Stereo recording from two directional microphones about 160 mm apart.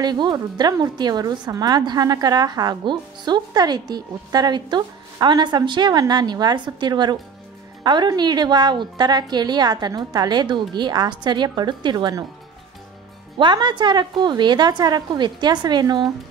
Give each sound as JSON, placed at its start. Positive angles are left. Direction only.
{"t": 0.0, "sound": "a woman's voice", "side_deg": -25}
{"t": 13.4, "sound": "a woman's voice", "side_deg": -30}